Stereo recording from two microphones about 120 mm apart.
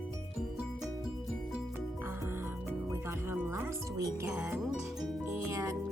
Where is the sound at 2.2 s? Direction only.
20° right (ahead or behind).